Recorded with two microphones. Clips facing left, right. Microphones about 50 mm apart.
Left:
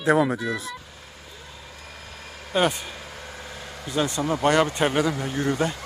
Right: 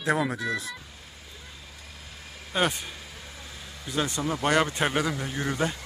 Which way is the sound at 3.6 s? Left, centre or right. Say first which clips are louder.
Left 6 dB; left.